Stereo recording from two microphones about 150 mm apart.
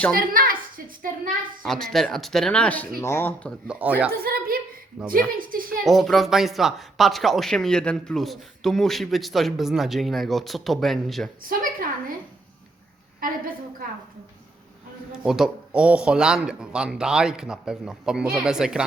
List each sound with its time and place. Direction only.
0.2 s a sound: 70° right (ahead or behind)
1.6 s speech: 5° left (ahead or behind)
3.7 s speech: 10° right (ahead or behind)
4.1 s a sound: 85° right
5.0 s speech: 5° right (ahead or behind)
5.4 s a woman's voice: 70° right (ahead or behind)
5.8 s speech: centre (ahead or behind)
11.4 s a woman's voice: 70° right (ahead or behind)
13.1 s a woman's voice: 70° right (ahead or behind)
15.2 s speech: 5° right (ahead or behind)